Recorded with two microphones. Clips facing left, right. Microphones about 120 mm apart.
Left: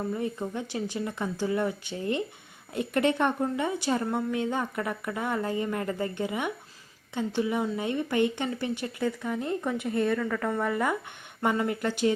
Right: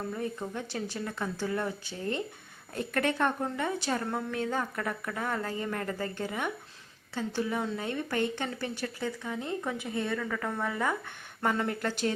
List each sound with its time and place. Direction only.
0.1 s a woman's voice: 15° left (ahead or behind)
2.7 s a woman's voice: 15° left (ahead or behind)
9.0 s a woman's voice: centre (ahead or behind)